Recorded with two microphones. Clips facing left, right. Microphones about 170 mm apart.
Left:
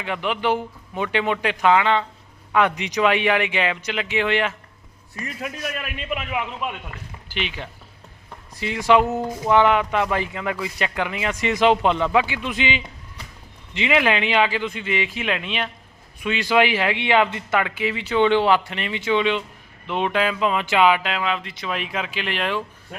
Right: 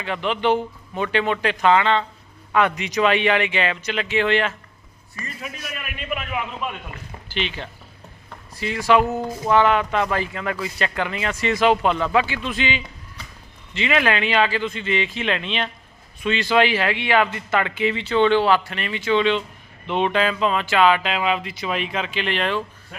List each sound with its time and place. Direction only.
0.0 s speech: 10° left (ahead or behind)
5.8 s a man's voice: 25° left (ahead or behind)
17.6 s speech: 5° left (ahead or behind)
21.0 s speech: 5° right (ahead or behind)